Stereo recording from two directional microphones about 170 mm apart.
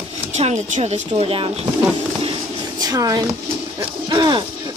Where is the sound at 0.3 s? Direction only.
40° right (ahead or behind).